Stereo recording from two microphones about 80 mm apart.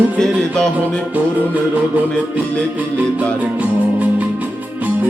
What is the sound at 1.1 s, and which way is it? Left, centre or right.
Music, centre.